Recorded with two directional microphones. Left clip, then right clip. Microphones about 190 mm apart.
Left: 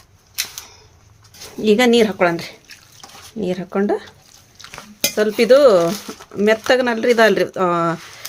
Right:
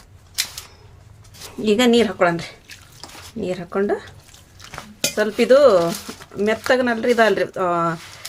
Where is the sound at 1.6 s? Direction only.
30° left (ahead or behind).